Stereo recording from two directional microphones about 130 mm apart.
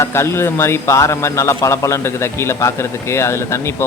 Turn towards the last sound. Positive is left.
turn(degrees=20)  # may be behind; listen again after turning